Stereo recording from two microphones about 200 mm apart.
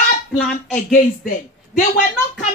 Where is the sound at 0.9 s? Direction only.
45° left (ahead or behind).